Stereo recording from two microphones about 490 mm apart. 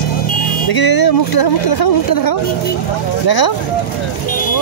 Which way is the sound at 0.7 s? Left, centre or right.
Left.